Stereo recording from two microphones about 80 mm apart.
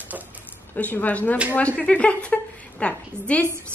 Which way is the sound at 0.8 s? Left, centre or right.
Left.